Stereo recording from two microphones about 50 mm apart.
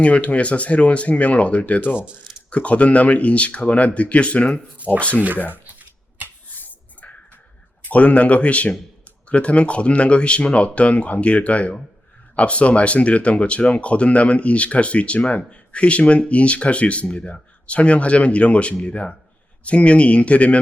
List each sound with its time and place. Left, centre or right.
0.0 s speech: left
5.5 s shuffling cards: right
7.9 s speech: left